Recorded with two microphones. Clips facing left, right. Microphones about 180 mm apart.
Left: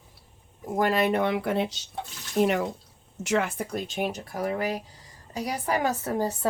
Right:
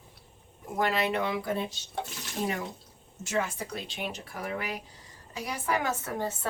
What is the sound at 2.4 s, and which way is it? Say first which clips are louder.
Speech: left 9 dB; 75° left (ahead or behind).